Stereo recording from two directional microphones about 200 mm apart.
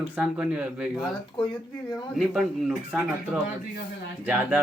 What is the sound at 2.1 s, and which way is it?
Speech, centre (ahead or behind).